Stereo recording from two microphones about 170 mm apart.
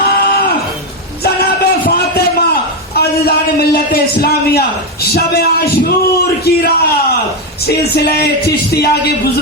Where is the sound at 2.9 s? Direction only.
65° left (ahead or behind).